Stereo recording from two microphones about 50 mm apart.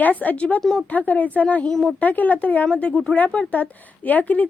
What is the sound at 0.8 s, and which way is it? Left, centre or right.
Speech, left.